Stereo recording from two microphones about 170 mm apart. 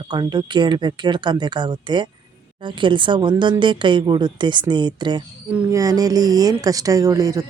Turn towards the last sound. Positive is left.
turn(degrees=-20)  # may be behind; listen again after turning